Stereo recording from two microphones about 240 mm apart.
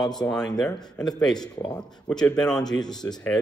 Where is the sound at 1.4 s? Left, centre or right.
Centre.